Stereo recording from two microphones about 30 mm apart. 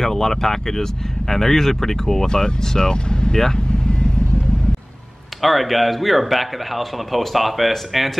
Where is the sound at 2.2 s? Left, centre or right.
Left.